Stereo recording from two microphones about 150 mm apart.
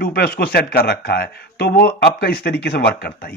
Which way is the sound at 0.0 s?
90° left.